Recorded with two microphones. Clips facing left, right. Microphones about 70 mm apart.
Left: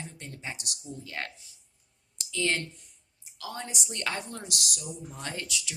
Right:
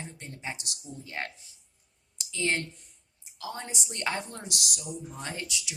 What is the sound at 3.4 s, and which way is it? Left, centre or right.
Speech, right.